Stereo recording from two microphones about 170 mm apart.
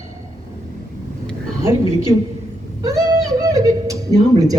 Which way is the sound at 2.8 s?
20° right (ahead or behind).